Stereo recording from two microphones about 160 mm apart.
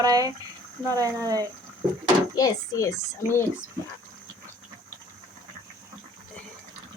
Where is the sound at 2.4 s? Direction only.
20° left (ahead or behind).